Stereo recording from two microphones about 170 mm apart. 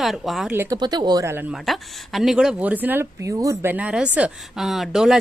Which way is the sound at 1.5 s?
Centre (ahead or behind).